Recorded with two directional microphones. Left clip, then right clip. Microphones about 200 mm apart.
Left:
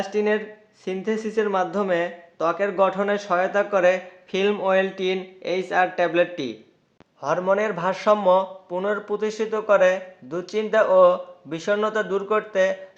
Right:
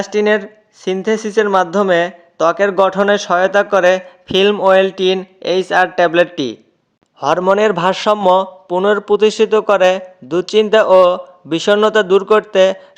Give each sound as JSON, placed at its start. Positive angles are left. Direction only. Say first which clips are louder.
{"t": 0.0, "sound": "speech", "louder": "right 8 dB", "side_deg": -45}